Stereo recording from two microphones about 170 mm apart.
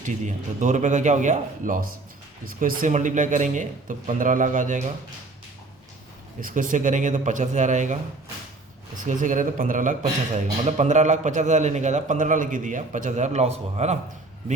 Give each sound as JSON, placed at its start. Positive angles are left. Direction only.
{"t": 0.0, "sound": "speech", "side_deg": -45}
{"t": 6.4, "sound": "speech", "side_deg": -50}
{"t": 9.0, "sound": "speech", "side_deg": -50}